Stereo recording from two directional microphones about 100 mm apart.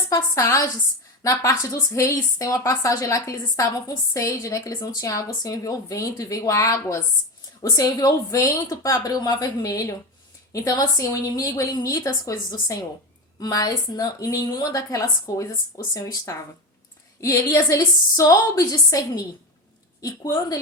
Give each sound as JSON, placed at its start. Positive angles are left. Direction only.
{"t": 0.1, "sound": "a woman's voice", "side_deg": 30}